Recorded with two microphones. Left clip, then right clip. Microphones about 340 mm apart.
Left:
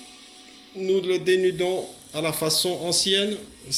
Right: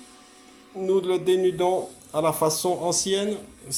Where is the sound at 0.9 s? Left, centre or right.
Centre.